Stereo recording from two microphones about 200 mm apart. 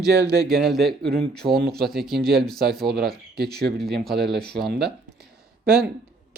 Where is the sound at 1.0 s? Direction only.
55° right (ahead or behind).